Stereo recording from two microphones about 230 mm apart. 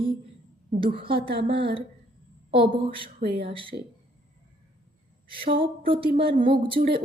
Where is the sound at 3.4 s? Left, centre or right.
Right.